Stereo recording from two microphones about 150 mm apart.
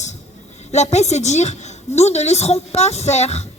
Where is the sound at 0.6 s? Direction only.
50° left (ahead or behind).